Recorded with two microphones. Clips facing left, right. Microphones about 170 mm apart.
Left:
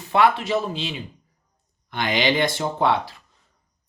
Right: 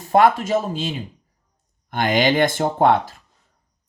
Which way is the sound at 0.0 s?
45° right (ahead or behind).